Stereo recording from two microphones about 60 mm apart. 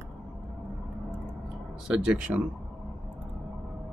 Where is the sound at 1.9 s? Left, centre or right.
Centre.